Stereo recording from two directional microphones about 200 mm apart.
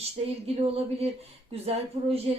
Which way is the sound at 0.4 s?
30° right (ahead or behind).